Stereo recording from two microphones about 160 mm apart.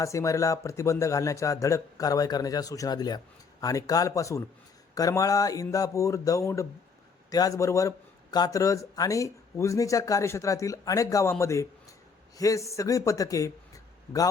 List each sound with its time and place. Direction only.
0.0 s a man's voice: 20° left (ahead or behind)